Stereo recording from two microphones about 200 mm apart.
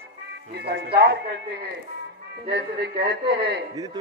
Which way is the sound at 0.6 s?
55° right (ahead or behind).